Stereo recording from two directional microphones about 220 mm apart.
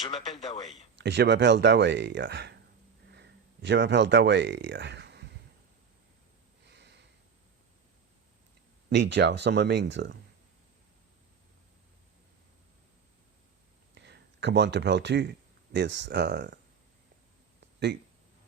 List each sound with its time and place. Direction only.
0.0 s speech: 30° left (ahead or behind)
0.9 s speech: 50° right (ahead or behind)
6.7 s a sound: 50° right (ahead or behind)
8.9 s speech: 50° right (ahead or behind)
13.9 s speech: 50° right (ahead or behind)